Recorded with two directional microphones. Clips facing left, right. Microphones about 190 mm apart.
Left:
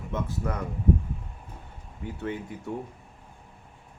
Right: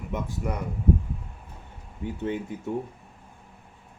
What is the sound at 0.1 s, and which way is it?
Speech, 15° right (ahead or behind).